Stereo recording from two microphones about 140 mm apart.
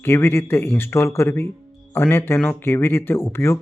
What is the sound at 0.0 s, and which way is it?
A man's voice, 15° left (ahead or behind).